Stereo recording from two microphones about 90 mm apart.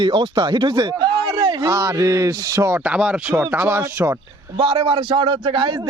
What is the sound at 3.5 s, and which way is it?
Speech, 25° right (ahead or behind).